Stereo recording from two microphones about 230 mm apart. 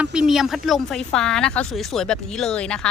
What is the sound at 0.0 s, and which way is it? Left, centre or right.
Speech, centre.